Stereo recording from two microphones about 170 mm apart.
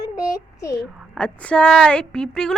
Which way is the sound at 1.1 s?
5° left (ahead or behind).